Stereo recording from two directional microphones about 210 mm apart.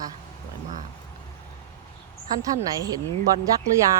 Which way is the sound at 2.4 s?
15° right (ahead or behind).